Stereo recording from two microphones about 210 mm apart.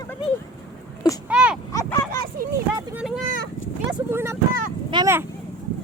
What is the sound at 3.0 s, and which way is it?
Speech, centre (ahead or behind).